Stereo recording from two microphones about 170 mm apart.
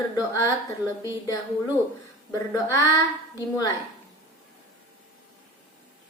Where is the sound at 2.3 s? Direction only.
20° left (ahead or behind).